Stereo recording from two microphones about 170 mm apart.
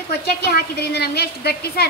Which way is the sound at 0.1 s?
70° left (ahead or behind).